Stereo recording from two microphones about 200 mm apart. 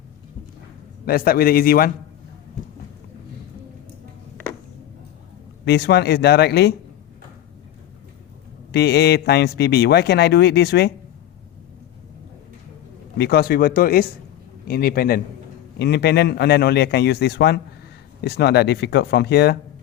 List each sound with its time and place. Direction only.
1.0 s speech: 50° left (ahead or behind)
5.6 s a man's voice: 55° left (ahead or behind)
8.7 s a man's voice: 55° left (ahead or behind)
13.1 s a man's voice: 55° left (ahead or behind)